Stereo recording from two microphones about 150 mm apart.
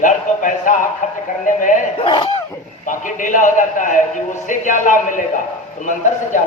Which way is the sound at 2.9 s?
60° left (ahead or behind).